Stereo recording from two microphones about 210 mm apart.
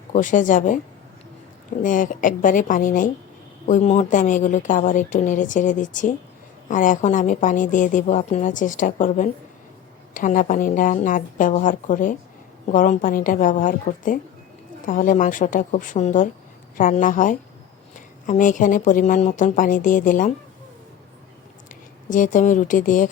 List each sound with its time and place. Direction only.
0.1 s a woman's voice: 35° left (ahead or behind)
1.8 s a woman's voice: 40° left (ahead or behind)
22.1 s a woman's voice: 35° left (ahead or behind)